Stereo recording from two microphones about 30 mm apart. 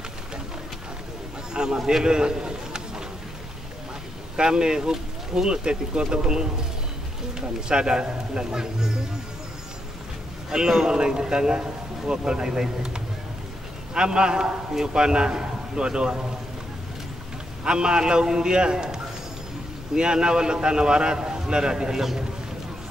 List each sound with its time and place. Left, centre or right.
1.5 s a sound: right
2.0 s a man's voice: right
4.4 s speech: right
10.5 s speech: right
17.6 s speech: right
20.0 s speech: right